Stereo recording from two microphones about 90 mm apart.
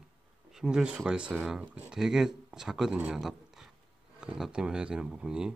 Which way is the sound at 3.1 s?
5° right (ahead or behind).